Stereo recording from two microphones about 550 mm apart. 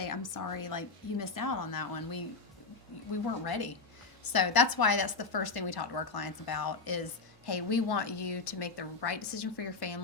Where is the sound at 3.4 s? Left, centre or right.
Left.